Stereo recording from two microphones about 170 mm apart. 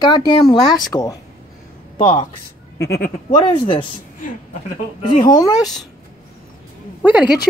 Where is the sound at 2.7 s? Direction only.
80° left.